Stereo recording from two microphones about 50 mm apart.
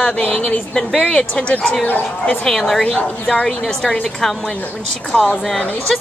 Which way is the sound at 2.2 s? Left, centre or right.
Centre.